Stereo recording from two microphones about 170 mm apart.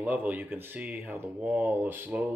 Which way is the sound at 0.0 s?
10° right (ahead or behind).